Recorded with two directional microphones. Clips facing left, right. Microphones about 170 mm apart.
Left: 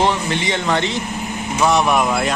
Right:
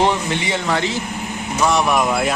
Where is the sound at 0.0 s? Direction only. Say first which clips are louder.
Even; 10° right (ahead or behind).